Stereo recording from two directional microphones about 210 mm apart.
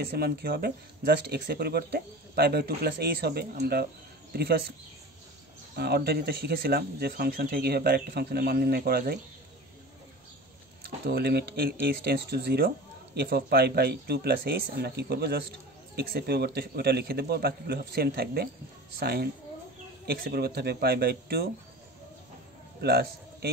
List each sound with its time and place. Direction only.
0.2 s speech: 45° right (ahead or behind)
5.8 s speech: 50° right (ahead or behind)
11.1 s speech: 50° right (ahead or behind)
22.8 s speech: 50° right (ahead or behind)